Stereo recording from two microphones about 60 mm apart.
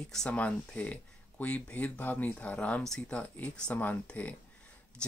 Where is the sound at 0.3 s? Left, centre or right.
Left.